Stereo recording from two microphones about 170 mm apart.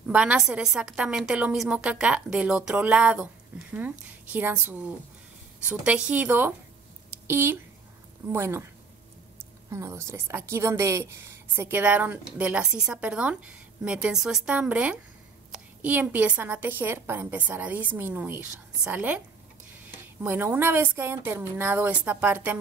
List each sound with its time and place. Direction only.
0.0 s a woman's voice: 5° right (ahead or behind)
9.7 s a woman's voice: 15° right (ahead or behind)
20.2 s a woman's voice: 15° right (ahead or behind)